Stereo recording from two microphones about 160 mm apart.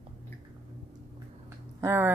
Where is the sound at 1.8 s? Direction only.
15° right (ahead or behind).